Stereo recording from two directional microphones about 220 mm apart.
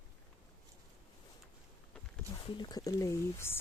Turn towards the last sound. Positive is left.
turn(degrees=10)  # may be behind; listen again after turning